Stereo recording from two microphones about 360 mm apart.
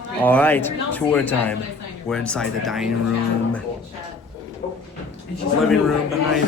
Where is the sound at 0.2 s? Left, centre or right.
Centre.